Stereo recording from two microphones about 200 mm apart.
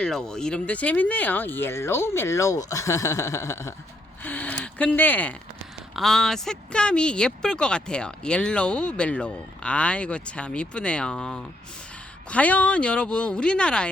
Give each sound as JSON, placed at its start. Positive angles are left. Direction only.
{"t": 0.0, "sound": "speech", "side_deg": 5}